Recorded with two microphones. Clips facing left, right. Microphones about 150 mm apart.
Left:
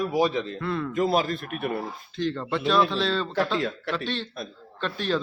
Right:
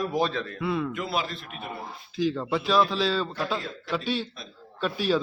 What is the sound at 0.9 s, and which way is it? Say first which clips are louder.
Speech: left 7 dB; 45° left (ahead or behind).